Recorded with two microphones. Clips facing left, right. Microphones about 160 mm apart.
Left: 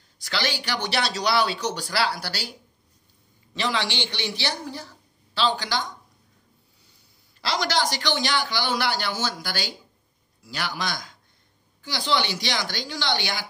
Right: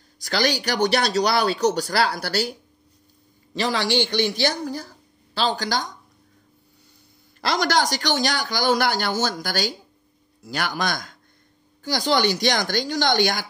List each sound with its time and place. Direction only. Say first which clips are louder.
0.2 s speech: right 6 dB; 40° right (ahead or behind)
3.5 s speech: right 5 dB; 40° right (ahead or behind)
7.4 s speech: right 4 dB; 50° right (ahead or behind)